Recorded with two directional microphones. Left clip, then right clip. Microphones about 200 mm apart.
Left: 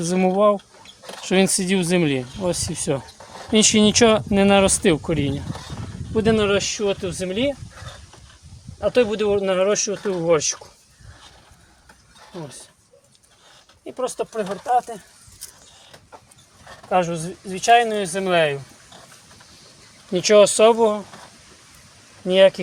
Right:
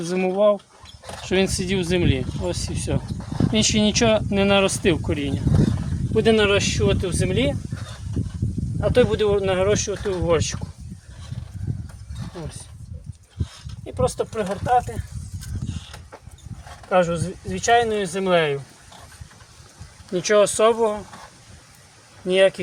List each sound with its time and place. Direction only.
0.0 s speech: 45° left (ahead or behind)
6.1 s speech: 20° left (ahead or behind)
8.8 s speech: 20° left (ahead or behind)
13.8 s speech: 15° left (ahead or behind)
16.9 s speech: 20° left (ahead or behind)
20.1 s speech: 25° left (ahead or behind)
22.3 s speech: 25° left (ahead or behind)